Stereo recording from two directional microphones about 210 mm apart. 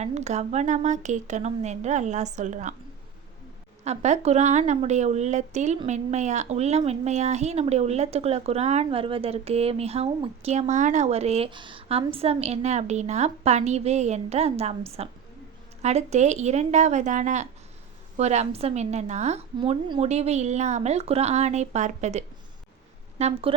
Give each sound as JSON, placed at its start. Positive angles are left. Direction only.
{"t": 0.0, "sound": "a woman's voice", "side_deg": -30}
{"t": 3.8, "sound": "a woman's voice", "side_deg": -30}